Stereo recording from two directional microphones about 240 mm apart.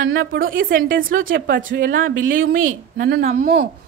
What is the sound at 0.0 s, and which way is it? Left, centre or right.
A woman's voice, right.